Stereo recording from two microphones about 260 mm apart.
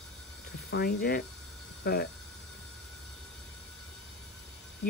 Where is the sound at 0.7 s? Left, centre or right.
Left.